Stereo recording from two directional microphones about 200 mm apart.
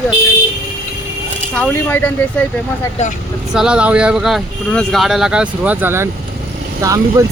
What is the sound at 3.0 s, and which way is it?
Speech, 35° left (ahead or behind).